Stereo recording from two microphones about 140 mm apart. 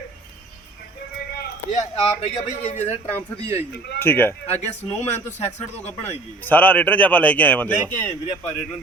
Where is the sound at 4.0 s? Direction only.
15° left (ahead or behind).